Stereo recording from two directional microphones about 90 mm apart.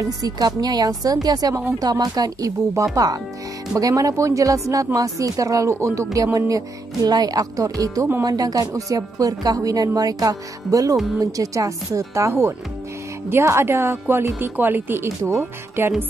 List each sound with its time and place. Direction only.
0.0 s a woman's voice: 40° right (ahead or behind)